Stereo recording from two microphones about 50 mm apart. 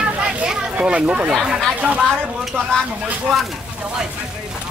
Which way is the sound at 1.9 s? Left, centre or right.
Centre.